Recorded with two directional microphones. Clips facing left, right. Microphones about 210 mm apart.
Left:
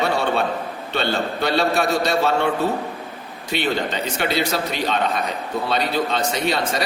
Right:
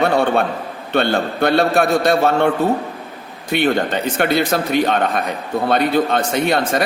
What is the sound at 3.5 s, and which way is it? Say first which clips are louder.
A man's voice: right 6 dB; 50° right (ahead or behind).